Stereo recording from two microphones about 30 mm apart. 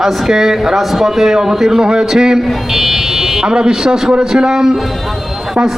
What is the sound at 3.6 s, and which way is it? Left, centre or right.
A man's voice, right.